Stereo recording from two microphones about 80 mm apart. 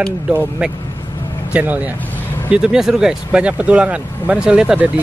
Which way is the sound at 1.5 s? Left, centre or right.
Centre.